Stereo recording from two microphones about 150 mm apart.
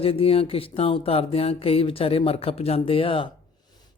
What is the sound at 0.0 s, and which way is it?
Speech, 40° left (ahead or behind).